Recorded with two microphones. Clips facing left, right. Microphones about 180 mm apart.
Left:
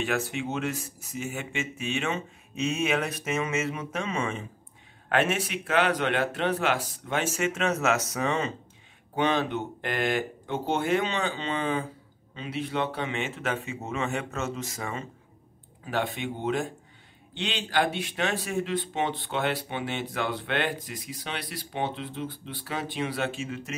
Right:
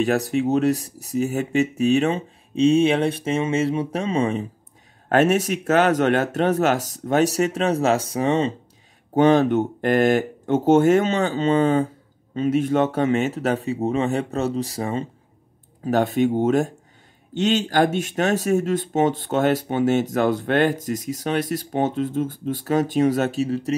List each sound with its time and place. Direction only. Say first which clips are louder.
0.0 s speech: right 9 dB; 40° right (ahead or behind)
9.1 s speech: right 10 dB; 45° right (ahead or behind)